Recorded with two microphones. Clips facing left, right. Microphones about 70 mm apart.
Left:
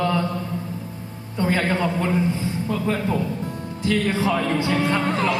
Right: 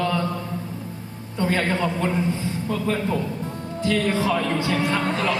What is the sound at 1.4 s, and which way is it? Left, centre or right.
A woman's voice, left.